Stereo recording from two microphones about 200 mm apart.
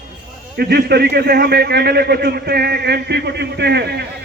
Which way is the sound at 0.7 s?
55° right (ahead or behind).